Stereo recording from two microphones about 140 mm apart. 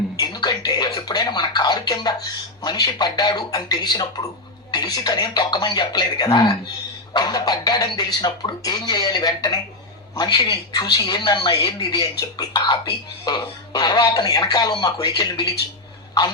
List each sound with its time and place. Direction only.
0.2 s speech: 30° left (ahead or behind)